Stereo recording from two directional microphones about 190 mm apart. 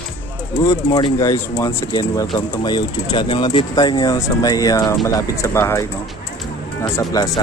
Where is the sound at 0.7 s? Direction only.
20° left (ahead or behind).